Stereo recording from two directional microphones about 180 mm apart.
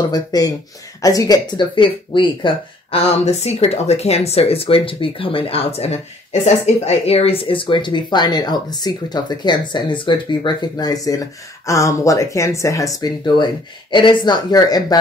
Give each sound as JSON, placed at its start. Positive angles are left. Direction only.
{"t": 0.1, "sound": "speech", "side_deg": 20}